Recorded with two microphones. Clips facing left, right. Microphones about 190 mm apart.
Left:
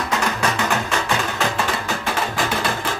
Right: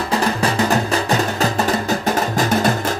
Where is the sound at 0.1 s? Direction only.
35° right (ahead or behind).